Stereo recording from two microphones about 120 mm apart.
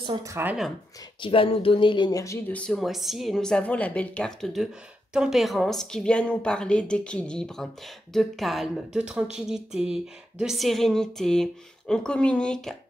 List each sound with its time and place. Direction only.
0.2 s speech: 25° right (ahead or behind)
1.2 s speech: 50° left (ahead or behind); by 2.5 s 25° left (ahead or behind)
2.5 s a woman's voice: 5° left (ahead or behind)